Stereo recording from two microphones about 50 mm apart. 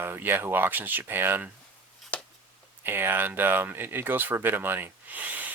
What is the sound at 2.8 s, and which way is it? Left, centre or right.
Speech, right.